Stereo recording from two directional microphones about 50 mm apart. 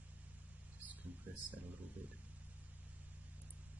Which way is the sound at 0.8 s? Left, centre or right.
Right.